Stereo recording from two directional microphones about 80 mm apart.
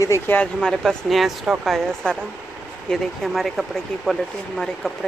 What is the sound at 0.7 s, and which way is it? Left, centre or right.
Speech, centre.